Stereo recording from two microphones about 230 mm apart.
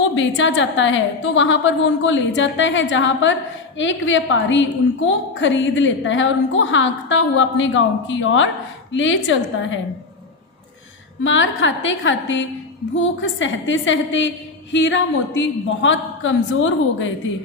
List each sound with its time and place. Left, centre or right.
0.0 s a woman's voice: left
11.2 s a woman's voice: left